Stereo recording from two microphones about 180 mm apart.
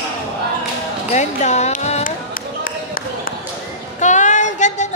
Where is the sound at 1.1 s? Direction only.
40° left (ahead or behind).